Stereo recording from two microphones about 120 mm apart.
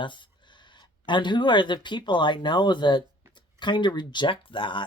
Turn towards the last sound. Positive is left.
turn(degrees=45)  # may be behind; listen again after turning